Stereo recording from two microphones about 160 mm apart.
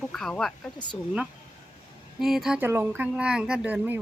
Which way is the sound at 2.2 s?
Centre (ahead or behind).